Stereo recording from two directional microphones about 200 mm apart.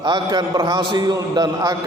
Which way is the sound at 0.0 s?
20° right (ahead or behind).